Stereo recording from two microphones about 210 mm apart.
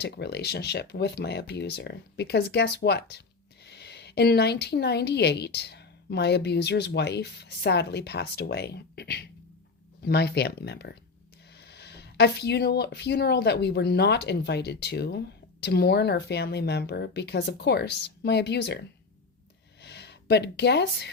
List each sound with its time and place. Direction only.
0.0 s speech: 55° left (ahead or behind)